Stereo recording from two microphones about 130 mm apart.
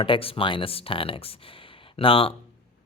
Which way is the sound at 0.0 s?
45° left (ahead or behind).